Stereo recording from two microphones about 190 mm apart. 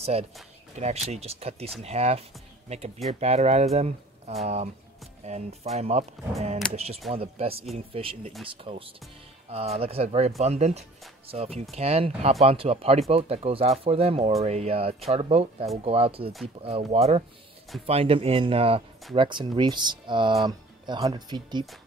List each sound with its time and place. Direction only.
0.0 s speech: 35° right (ahead or behind)